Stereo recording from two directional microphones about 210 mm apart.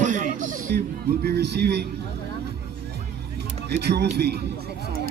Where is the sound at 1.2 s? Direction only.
50° right (ahead or behind).